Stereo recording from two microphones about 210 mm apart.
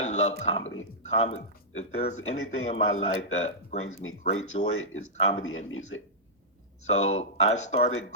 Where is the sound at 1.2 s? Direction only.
30° left (ahead or behind).